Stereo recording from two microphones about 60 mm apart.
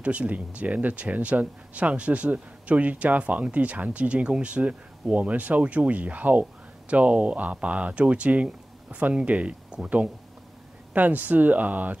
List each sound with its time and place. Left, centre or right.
0.0 s speech: right